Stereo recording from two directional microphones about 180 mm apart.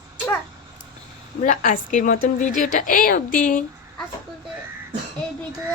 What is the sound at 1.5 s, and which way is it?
A woman's voice, 45° left (ahead or behind).